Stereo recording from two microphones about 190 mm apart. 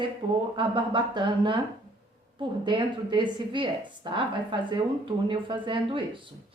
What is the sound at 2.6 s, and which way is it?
A woman's voice, 25° right (ahead or behind).